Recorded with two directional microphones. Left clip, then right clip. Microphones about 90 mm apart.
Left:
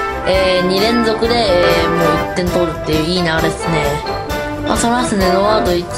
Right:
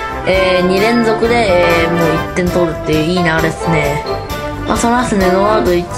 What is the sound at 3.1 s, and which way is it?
Music, 15° left (ahead or behind).